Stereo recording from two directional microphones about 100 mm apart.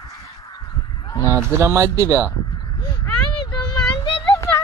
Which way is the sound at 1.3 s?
25° right (ahead or behind).